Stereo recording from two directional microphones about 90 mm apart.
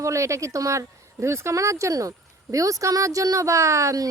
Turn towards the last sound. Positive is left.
turn(degrees=-35)  # may be behind; listen again after turning